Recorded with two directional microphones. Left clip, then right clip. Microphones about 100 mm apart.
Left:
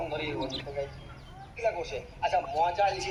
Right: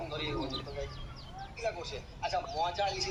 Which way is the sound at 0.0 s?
45° left (ahead or behind).